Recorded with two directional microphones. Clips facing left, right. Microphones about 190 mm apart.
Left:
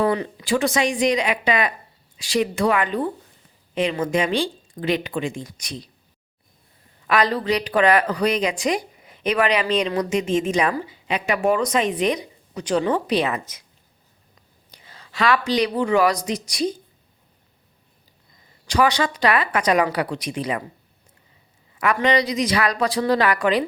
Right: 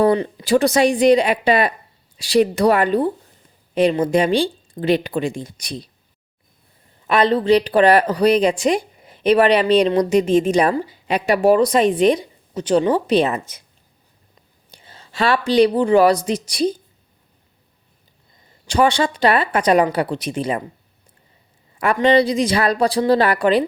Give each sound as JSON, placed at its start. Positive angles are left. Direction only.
{"t": 0.0, "sound": "speech", "side_deg": -35}
{"t": 7.1, "sound": "speech", "side_deg": -25}
{"t": 14.7, "sound": "speech", "side_deg": -30}
{"t": 18.7, "sound": "speech", "side_deg": -30}
{"t": 22.0, "sound": "speech", "side_deg": -30}